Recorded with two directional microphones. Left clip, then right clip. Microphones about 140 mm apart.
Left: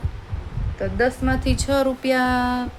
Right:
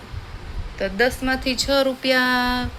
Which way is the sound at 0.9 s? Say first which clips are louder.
Right 1 dB; 10° left (ahead or behind).